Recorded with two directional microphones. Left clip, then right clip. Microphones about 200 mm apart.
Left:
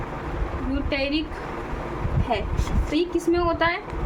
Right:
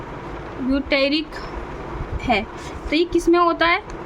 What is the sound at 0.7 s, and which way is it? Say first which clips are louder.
Speech: right 7 dB; 55° right (ahead or behind).